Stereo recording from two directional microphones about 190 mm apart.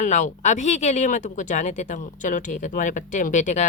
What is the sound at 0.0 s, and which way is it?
Speech, 40° left (ahead or behind).